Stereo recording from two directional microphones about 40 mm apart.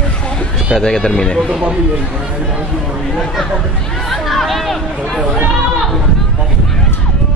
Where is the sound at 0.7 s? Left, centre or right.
Centre.